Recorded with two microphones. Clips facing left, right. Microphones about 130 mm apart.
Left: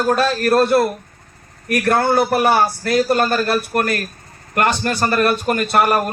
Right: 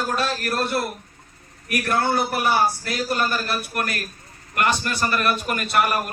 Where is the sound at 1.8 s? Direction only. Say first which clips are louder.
Left 6 dB; 65° left (ahead or behind).